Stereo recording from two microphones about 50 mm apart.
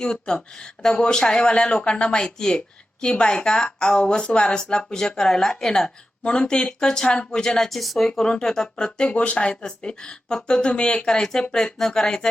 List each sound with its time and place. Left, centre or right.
0.0 s speech: centre
9.1 s speech: left